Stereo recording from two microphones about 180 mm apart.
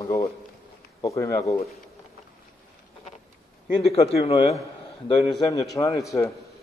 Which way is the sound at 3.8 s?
35° left (ahead or behind).